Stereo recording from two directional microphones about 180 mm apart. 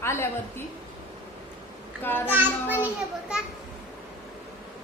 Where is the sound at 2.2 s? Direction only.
10° right (ahead or behind).